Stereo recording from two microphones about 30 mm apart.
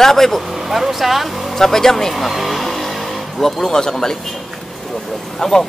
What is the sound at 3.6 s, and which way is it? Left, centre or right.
Speech, centre.